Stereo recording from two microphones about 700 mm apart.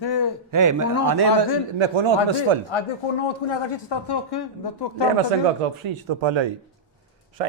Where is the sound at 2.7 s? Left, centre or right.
Left.